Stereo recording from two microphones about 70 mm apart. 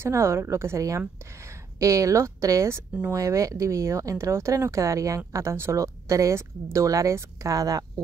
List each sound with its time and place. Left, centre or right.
0.0 s speech: right